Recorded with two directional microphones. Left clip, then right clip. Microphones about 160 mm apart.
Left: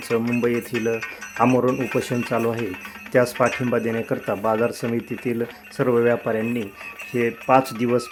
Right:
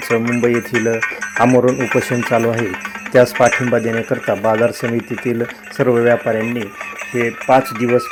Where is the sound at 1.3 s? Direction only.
25° right (ahead or behind).